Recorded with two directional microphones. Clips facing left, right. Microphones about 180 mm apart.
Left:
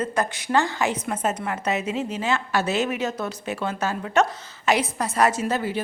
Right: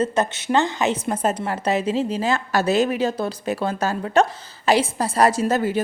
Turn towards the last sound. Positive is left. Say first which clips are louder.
# right 5 dB
turn(degrees=-45)  # may be behind; listen again after turning